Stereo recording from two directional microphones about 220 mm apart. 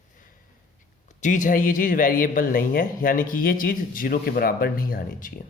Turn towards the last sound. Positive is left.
turn(degrees=40)  # may be behind; listen again after turning